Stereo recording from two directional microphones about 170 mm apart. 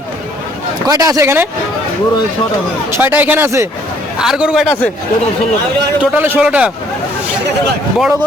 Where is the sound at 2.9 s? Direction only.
10° right (ahead or behind).